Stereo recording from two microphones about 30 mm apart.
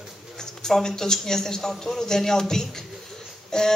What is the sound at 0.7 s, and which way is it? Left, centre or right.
A man's voice, centre.